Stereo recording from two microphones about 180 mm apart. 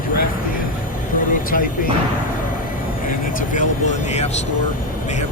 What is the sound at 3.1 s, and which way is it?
Speech, 45° left (ahead or behind).